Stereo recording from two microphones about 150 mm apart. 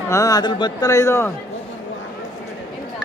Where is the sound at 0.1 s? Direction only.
25° left (ahead or behind).